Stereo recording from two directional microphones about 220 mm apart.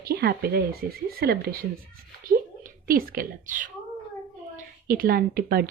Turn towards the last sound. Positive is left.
turn(degrees=-40)  # may be behind; listen again after turning